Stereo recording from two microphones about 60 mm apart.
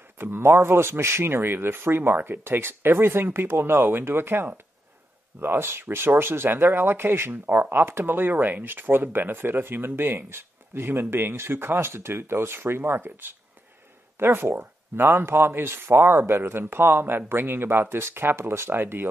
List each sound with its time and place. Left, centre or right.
0.2 s speech: right